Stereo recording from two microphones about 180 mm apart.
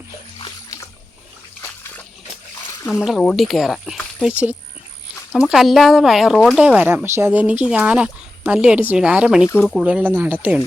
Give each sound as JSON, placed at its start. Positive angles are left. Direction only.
{"t": 0.3, "sound": "splash", "side_deg": 25}
{"t": 3.0, "sound": "speech", "side_deg": 0}